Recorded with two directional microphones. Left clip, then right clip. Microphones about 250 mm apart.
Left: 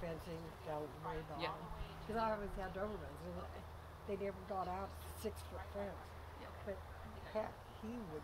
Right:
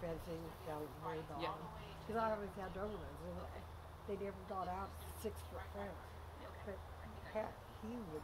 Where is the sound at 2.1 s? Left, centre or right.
Left.